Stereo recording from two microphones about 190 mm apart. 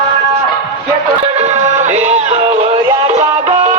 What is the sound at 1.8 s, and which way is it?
Music, 40° right (ahead or behind).